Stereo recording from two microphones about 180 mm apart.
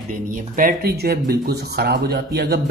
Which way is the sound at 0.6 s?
55° right (ahead or behind).